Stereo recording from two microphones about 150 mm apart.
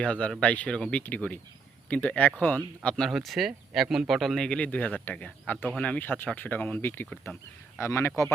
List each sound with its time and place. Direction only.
0.0 s speech: 5° left (ahead or behind)